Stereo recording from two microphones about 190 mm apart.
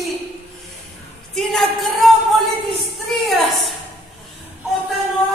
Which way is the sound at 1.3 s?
Centre (ahead or behind).